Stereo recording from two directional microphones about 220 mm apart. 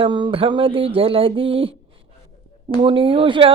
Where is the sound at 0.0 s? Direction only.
20° right (ahead or behind).